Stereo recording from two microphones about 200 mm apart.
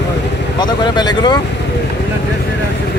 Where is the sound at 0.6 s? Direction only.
20° left (ahead or behind).